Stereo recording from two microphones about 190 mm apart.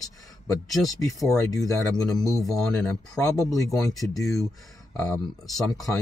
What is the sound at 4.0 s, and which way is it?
Speech, centre (ahead or behind).